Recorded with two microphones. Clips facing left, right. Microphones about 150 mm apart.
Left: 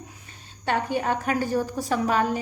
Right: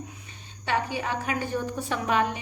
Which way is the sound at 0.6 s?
50° left (ahead or behind).